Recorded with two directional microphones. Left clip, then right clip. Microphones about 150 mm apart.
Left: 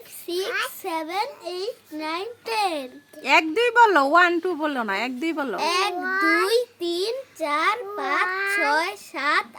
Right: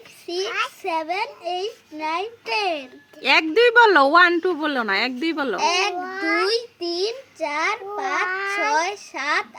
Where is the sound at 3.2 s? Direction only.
10° right (ahead or behind).